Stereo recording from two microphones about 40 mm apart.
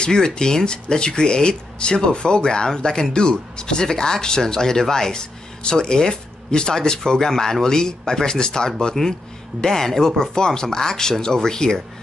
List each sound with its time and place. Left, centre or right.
0.0 s speech: centre